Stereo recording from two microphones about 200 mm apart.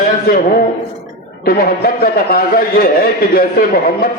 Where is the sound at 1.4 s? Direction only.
50° left (ahead or behind).